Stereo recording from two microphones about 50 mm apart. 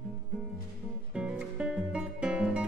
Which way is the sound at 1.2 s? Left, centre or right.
Right.